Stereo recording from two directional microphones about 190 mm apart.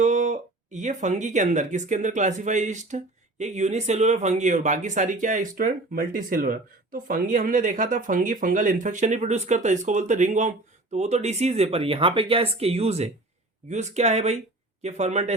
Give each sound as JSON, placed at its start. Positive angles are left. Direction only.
{"t": 0.0, "sound": "speech", "side_deg": -40}